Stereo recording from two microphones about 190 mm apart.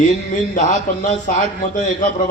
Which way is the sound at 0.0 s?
40° left (ahead or behind).